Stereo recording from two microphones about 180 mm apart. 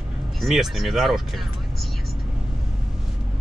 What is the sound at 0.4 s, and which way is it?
Speech, centre (ahead or behind).